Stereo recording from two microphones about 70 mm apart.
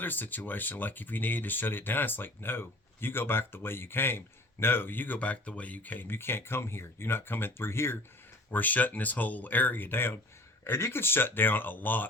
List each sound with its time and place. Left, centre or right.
0.0 s speech: left
8.4 s speech: left